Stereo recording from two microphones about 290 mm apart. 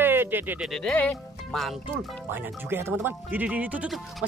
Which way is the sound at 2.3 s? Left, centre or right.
Centre.